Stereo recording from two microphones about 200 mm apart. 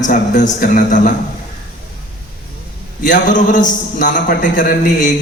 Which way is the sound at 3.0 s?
40° left (ahead or behind).